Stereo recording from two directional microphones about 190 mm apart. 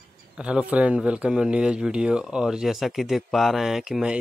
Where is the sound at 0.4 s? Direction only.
5° right (ahead or behind).